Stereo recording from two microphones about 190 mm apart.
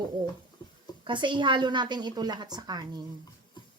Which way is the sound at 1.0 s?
25° right (ahead or behind).